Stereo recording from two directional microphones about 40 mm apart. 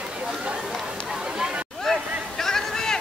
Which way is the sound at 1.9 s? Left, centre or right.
Centre.